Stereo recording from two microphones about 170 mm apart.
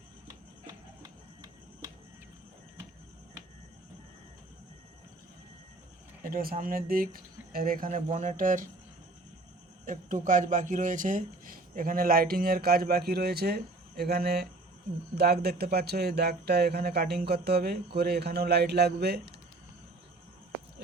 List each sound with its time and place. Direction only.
6.3 s speech: 60° right (ahead or behind)
9.8 s speech: 50° right (ahead or behind); by 19.2 s 70° right (ahead or behind)